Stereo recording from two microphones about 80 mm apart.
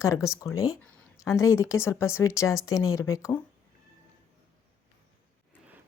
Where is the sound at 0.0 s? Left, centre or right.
Left.